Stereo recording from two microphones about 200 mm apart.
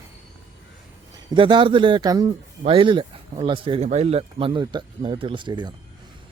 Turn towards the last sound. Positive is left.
turn(degrees=-25)  # may be behind; listen again after turning